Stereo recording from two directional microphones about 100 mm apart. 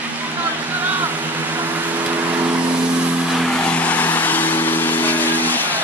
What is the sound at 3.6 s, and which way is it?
Vehicle, 15° left (ahead or behind).